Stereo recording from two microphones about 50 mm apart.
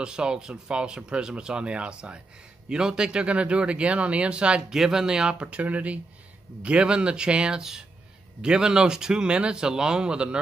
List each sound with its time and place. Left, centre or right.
0.0 s speech: centre
4.6 s speech: centre